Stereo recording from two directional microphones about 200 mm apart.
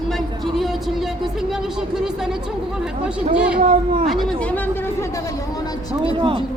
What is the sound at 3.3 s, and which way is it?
Speech, 5° right (ahead or behind).